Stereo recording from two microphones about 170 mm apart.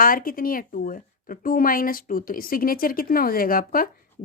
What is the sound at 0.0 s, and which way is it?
Speech, 55° left (ahead or behind).